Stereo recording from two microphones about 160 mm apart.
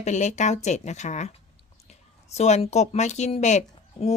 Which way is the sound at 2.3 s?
40° left (ahead or behind).